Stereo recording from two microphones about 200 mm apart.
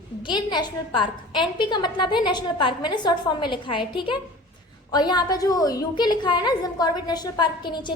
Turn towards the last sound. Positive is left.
turn(degrees=20)  # may be behind; listen again after turning